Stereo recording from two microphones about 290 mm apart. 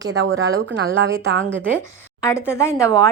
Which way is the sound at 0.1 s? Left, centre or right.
Right.